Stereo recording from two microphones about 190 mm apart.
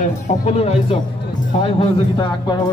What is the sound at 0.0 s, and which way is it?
Speech, 35° left (ahead or behind).